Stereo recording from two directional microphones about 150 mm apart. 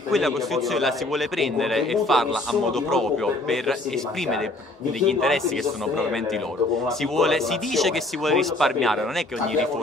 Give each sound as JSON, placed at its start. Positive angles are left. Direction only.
{"t": 0.1, "sound": "a man's voice", "side_deg": 0}
{"t": 5.0, "sound": "a man's voice", "side_deg": 5}
{"t": 7.0, "sound": "a man's voice", "side_deg": 0}